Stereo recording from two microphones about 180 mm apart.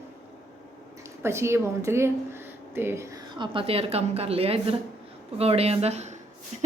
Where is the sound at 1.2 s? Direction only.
15° right (ahead or behind).